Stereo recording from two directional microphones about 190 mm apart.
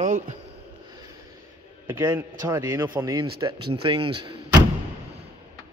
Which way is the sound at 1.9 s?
15° right (ahead or behind).